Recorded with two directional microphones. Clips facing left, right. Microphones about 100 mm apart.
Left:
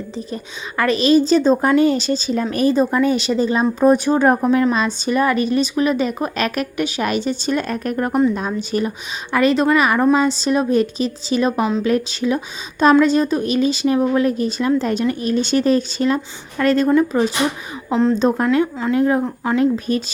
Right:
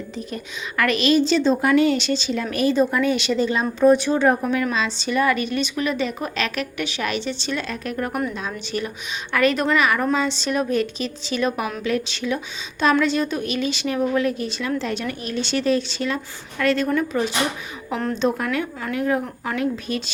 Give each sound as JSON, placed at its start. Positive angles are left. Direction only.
{"t": 0.8, "sound": "a woman's voice", "side_deg": 35}
{"t": 17.8, "sound": "speech", "side_deg": 20}
{"t": 18.2, "sound": "a woman's voice", "side_deg": 35}
{"t": 18.4, "sound": "speech", "side_deg": 25}